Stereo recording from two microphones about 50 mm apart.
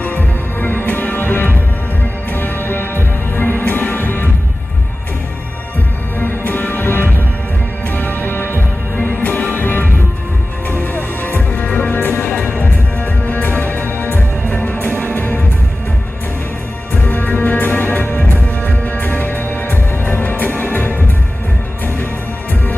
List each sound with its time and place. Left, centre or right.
0.0 s music: left
6.1 s music: left
17.1 s music: left